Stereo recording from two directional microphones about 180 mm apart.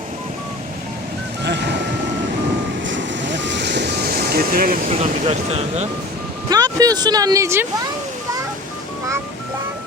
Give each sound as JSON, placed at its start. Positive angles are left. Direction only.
{"t": 1.5, "sound": "vehicle", "side_deg": -70}
{"t": 2.8, "sound": "waves", "side_deg": -90}
{"t": 4.9, "sound": "speech", "side_deg": -35}
{"t": 6.5, "sound": "speech", "side_deg": -20}